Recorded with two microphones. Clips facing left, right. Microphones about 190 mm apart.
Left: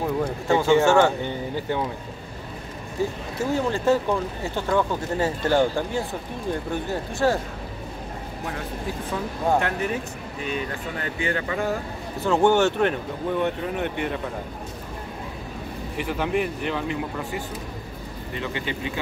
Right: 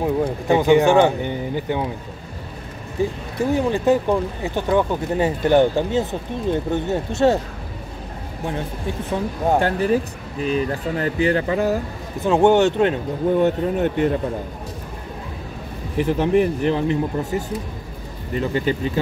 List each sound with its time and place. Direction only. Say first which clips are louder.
0.0 s speech: right 4 dB; 15° right (ahead or behind)
3.0 s speech: right 4 dB; 15° right (ahead or behind)
9.6 s speech: right 7 dB; 30° right (ahead or behind)
12.2 s speech: right 4 dB; 20° right (ahead or behind)
13.4 s speech: right 6 dB; 40° right (ahead or behind)
16.0 s speech: right 8 dB; 35° right (ahead or behind)